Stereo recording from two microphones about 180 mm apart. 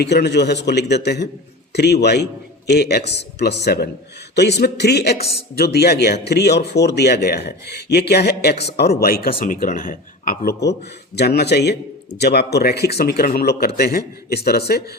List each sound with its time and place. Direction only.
0.0 s a man's voice: 65° left (ahead or behind); by 10.5 s 50° left (ahead or behind)
11.2 s a man's voice: 65° left (ahead or behind)